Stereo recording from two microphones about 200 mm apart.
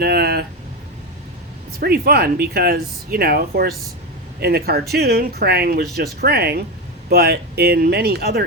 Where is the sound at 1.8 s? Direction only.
50° right (ahead or behind).